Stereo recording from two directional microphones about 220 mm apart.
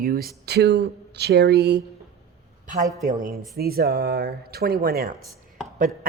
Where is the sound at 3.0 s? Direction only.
35° right (ahead or behind).